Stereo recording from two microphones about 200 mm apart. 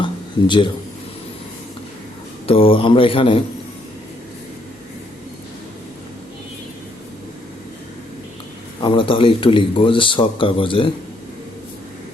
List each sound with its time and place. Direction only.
0.0 s a sound: 25° left (ahead or behind)
2.5 s speech: 30° left (ahead or behind)
8.8 s speech: 25° left (ahead or behind)